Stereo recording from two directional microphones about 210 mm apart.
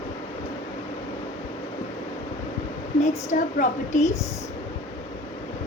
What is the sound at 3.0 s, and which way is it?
A woman's voice, 35° left (ahead or behind).